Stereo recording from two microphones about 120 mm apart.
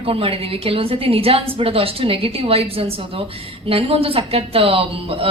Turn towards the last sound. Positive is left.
turn(degrees=-50)  # may be behind; listen again after turning